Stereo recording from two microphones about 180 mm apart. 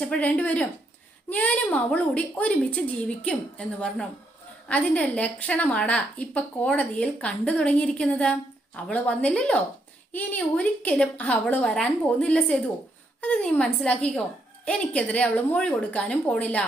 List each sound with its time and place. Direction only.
0.0 s a woman's voice: 5° left (ahead or behind)